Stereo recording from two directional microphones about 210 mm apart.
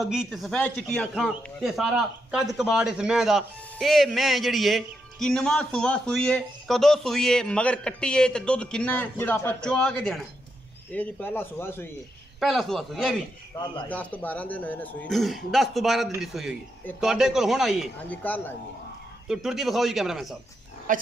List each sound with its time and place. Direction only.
0.0 s a man's voice: centre (ahead or behind)
12.4 s a man's voice: centre (ahead or behind)
20.9 s speech: 40° right (ahead or behind)